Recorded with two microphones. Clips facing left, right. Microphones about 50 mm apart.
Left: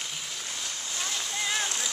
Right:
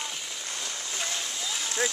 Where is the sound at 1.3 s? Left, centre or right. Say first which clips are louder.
Left 4 dB; left.